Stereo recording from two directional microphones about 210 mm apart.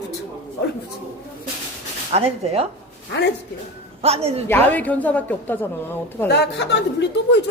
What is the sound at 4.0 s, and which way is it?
Speech, 30° right (ahead or behind).